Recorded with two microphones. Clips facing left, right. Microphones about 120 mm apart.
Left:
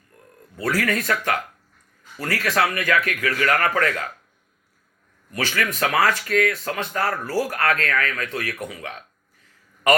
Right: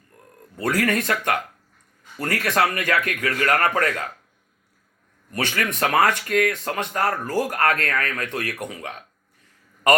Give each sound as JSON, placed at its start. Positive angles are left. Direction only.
{"t": 0.6, "sound": "speech", "side_deg": -20}
{"t": 5.4, "sound": "speech", "side_deg": -25}